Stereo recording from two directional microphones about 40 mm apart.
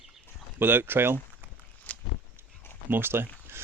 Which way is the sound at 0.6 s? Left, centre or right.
Right.